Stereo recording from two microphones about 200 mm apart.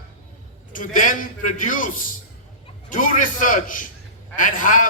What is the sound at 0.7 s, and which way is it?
A man's voice, 40° left (ahead or behind).